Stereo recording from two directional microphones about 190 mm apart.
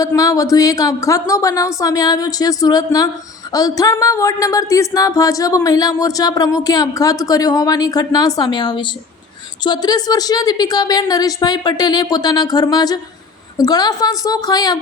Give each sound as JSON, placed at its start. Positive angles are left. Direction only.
{"t": 0.0, "sound": "speech", "side_deg": 20}